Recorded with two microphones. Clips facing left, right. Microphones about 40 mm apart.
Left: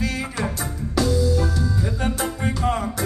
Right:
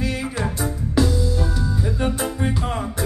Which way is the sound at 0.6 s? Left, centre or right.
Right.